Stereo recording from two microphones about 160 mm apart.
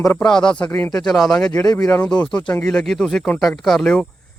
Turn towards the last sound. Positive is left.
turn(degrees=5)  # may be behind; listen again after turning